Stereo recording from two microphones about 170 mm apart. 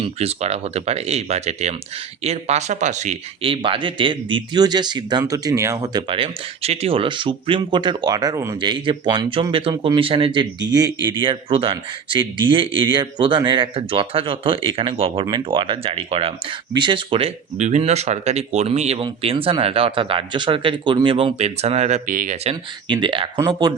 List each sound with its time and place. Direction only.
0.0 s a man's voice: 35° right (ahead or behind)
22.9 s speech: 30° right (ahead or behind)